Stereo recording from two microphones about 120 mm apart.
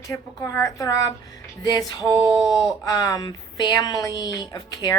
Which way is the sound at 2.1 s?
Centre (ahead or behind).